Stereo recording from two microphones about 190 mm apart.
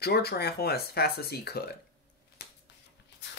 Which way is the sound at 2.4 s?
55° left (ahead or behind).